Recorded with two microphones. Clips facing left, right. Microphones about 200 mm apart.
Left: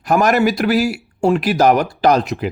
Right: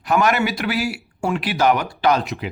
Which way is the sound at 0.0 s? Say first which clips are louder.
Left 4 dB; 40° left (ahead or behind).